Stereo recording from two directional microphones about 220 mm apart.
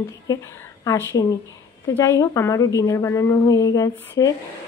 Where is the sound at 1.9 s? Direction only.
15° left (ahead or behind).